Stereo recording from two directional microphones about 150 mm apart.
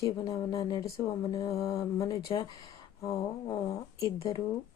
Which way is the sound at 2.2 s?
35° left (ahead or behind).